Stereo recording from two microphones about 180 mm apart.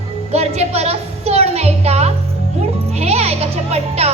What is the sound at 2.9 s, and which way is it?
Music, 35° right (ahead or behind).